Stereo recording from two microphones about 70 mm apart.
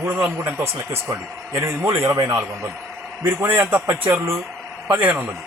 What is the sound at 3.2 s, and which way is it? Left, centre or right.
A man's voice, right.